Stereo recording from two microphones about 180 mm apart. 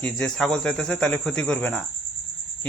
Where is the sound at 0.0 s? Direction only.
5° left (ahead or behind).